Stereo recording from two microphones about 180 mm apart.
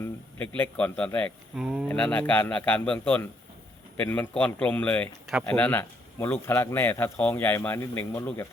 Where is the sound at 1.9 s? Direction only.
5° left (ahead or behind).